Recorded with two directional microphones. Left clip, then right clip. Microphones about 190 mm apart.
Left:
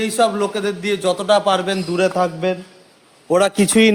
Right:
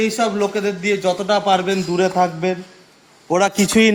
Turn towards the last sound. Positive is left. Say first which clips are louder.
# left 1 dB
turn(degrees=35)  # may be behind; listen again after turning